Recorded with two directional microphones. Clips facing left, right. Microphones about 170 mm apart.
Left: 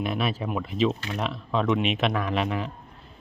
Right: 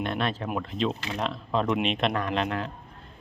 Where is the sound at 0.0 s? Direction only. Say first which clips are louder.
Left 1 dB; 5° left (ahead or behind).